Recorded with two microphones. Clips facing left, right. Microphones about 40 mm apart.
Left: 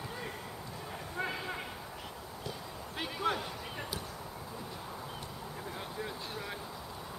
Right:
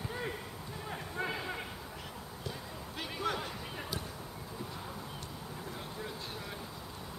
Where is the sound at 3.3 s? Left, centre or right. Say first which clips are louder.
Left 3 dB; centre.